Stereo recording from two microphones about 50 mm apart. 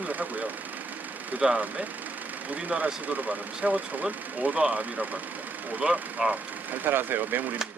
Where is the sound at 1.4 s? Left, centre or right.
Centre.